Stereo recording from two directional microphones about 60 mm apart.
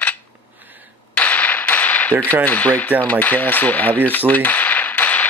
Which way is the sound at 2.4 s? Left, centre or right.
Left.